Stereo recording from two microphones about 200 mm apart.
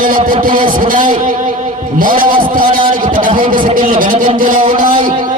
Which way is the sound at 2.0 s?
45° right (ahead or behind).